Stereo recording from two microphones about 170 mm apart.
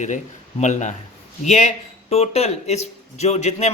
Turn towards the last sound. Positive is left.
turn(degrees=40)  # may be behind; listen again after turning